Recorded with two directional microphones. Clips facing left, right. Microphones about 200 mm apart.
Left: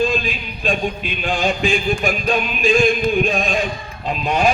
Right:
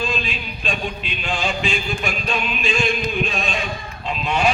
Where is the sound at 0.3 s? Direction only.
50° left (ahead or behind).